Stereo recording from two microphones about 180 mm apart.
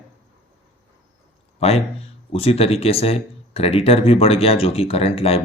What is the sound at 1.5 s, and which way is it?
Speech, 35° left (ahead or behind).